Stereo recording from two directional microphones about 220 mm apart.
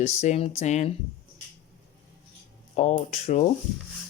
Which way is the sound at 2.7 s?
30° left (ahead or behind).